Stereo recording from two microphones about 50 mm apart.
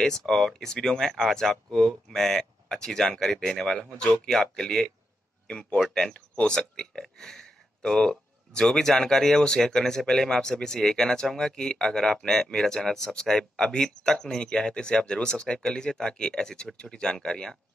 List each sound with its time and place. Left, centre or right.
0.0 s speech: centre